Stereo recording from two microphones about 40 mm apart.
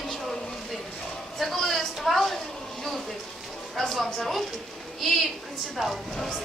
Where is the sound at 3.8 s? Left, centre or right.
Centre.